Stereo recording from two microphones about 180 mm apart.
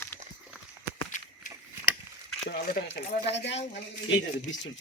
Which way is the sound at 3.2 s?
70° left (ahead or behind).